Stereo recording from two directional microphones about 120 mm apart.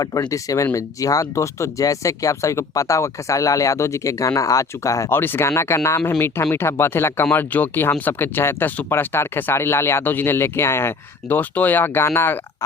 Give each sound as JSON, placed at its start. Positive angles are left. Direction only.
{"t": 0.0, "sound": "speech", "side_deg": 30}